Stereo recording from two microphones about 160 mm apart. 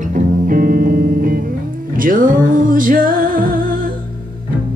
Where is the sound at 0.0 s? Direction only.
55° right (ahead or behind).